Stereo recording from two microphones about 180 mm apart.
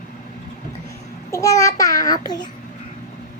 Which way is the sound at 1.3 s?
15° left (ahead or behind).